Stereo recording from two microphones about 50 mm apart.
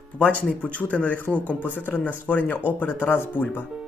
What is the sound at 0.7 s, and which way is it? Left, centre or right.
Speech, left.